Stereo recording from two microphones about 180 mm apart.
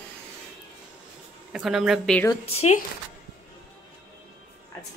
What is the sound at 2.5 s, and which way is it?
Speech, 35° left (ahead or behind).